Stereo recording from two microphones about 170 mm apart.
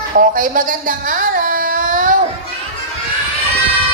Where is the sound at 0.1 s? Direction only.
55° right (ahead or behind).